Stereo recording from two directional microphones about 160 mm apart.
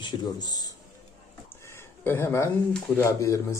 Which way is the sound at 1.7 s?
15° left (ahead or behind).